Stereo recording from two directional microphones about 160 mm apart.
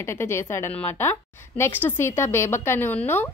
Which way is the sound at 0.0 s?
15° left (ahead or behind).